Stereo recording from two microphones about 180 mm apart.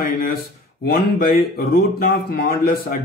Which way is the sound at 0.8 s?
55° left (ahead or behind).